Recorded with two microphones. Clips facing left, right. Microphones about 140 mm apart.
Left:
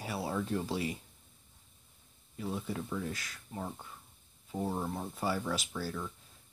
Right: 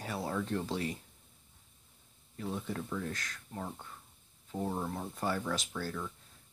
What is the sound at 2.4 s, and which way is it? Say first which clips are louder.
Speech: left 1 dB; 5° left (ahead or behind).